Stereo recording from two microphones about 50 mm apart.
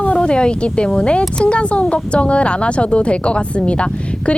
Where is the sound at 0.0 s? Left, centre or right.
Left.